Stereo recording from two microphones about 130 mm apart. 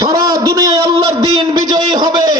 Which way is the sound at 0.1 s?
25° right (ahead or behind).